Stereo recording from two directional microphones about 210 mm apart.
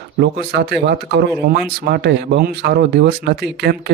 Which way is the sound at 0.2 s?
50° right (ahead or behind).